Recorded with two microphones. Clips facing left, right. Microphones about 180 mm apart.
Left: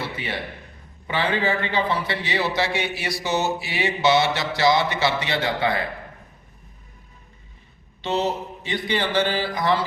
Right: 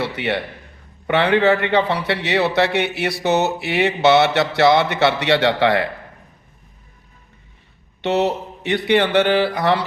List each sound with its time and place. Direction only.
0.0 s a man's voice: 70° right (ahead or behind)
8.0 s a man's voice: 65° right (ahead or behind)